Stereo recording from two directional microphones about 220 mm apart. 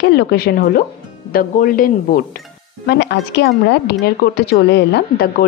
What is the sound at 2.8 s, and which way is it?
Speech, 50° left (ahead or behind).